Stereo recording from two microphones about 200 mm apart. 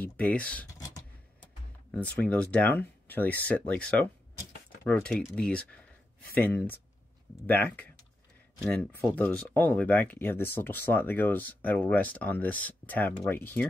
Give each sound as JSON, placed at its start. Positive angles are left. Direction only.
{"t": 0.0, "sound": "speech", "side_deg": 5}
{"t": 0.7, "sound": "a sound", "side_deg": 15}
{"t": 2.0, "sound": "speech", "side_deg": 5}